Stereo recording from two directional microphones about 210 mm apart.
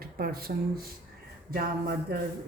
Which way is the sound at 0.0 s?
45° right (ahead or behind).